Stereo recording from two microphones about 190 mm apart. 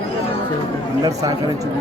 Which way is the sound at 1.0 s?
15° right (ahead or behind).